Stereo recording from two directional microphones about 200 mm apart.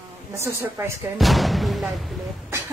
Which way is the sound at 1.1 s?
Centre (ahead or behind).